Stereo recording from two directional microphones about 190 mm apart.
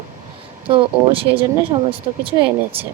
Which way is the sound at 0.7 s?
30° right (ahead or behind).